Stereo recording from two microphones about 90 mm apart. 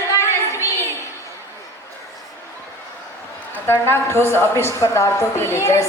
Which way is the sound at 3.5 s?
30° left (ahead or behind).